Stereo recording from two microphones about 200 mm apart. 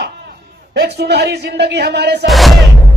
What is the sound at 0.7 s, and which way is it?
A man's voice, 55° right (ahead or behind).